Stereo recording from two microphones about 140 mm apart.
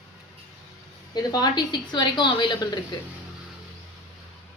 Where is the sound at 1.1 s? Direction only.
30° left (ahead or behind).